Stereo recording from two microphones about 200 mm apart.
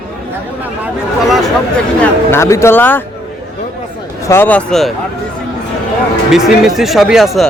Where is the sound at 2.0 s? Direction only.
15° left (ahead or behind).